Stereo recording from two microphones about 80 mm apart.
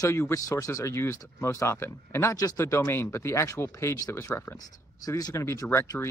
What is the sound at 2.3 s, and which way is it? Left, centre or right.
Speech, left.